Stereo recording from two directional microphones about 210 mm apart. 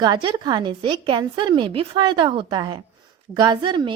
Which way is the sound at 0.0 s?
20° right (ahead or behind).